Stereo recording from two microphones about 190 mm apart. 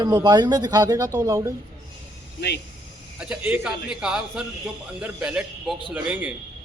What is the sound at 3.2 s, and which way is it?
A man's voice, 5° right (ahead or behind).